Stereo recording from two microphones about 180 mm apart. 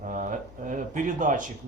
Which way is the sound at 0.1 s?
45° right (ahead or behind).